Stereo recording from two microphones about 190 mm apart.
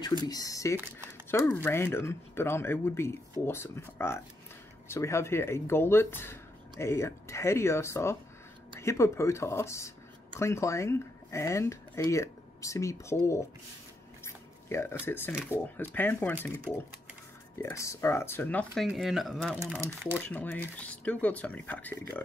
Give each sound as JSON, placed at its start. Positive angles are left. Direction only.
{"t": 0.3, "sound": "speech", "side_deg": 20}
{"t": 14.2, "sound": "a sound", "side_deg": 15}
{"t": 15.5, "sound": "speech", "side_deg": 10}
{"t": 19.6, "sound": "speech", "side_deg": -15}
{"t": 20.2, "sound": "speech", "side_deg": 10}